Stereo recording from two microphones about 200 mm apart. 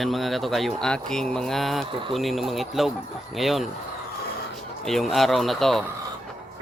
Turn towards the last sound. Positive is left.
turn(degrees=0)  # may be behind; listen again after turning